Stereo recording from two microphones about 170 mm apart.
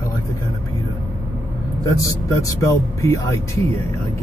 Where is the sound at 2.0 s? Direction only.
20° left (ahead or behind).